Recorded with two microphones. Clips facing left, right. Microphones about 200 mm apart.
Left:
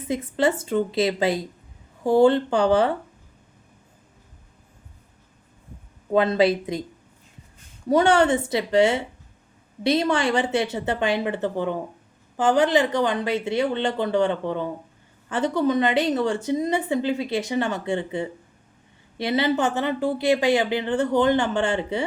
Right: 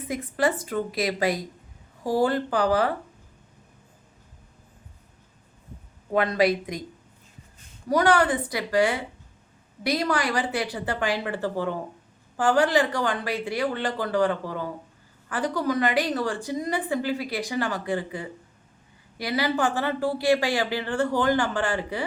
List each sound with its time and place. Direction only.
0.0 s a woman's voice: 25° left (ahead or behind)
6.1 s a woman's voice: 25° left (ahead or behind)
7.9 s a woman's voice: 25° left (ahead or behind)